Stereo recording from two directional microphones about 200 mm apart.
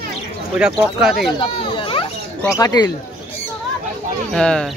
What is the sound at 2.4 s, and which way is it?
Speech, 15° left (ahead or behind).